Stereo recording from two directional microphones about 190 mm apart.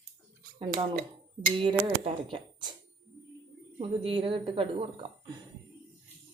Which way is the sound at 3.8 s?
30° right (ahead or behind).